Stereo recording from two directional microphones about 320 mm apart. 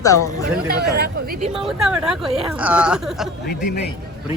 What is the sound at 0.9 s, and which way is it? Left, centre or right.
Speech, right.